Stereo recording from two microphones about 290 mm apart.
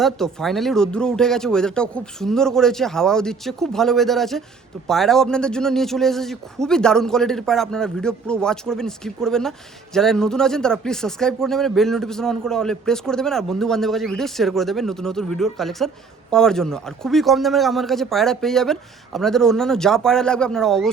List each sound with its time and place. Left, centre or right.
0.0 s a man's voice: centre